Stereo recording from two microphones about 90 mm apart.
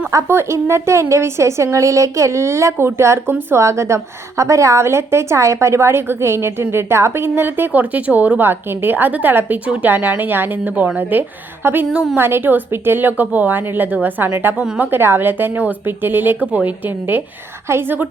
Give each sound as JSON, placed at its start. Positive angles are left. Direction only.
{"t": 0.1, "sound": "a woman's voice", "side_deg": -30}